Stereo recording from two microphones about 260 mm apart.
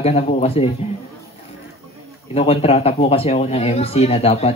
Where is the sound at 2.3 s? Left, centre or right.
Left.